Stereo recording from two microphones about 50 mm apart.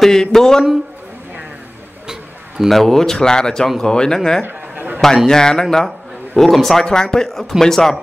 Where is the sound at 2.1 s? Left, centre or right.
Centre.